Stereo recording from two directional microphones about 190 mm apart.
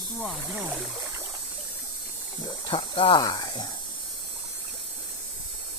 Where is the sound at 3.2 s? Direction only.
20° left (ahead or behind).